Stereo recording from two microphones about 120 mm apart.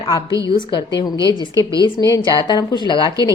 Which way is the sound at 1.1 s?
30° right (ahead or behind).